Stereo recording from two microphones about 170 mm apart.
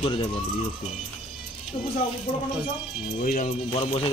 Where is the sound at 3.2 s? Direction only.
45° left (ahead or behind).